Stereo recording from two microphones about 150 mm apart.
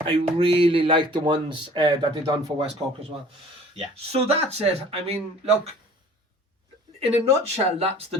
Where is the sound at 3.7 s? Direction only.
45° right (ahead or behind).